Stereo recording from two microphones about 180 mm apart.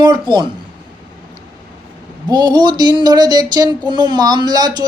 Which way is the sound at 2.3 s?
25° right (ahead or behind).